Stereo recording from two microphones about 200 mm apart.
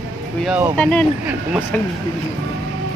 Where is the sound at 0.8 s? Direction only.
5° left (ahead or behind).